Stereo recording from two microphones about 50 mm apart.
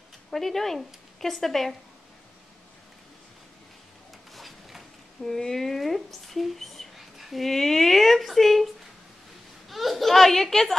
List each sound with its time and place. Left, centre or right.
0.3 s speech: centre
4.3 s zipper: centre
7.4 s speech: centre
9.7 s speech: centre